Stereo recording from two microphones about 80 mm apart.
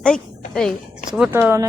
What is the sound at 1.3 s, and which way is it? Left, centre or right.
Speech, right.